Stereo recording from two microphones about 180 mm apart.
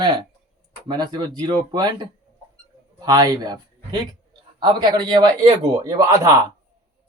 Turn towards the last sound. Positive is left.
turn(degrees=-20)  # may be behind; listen again after turning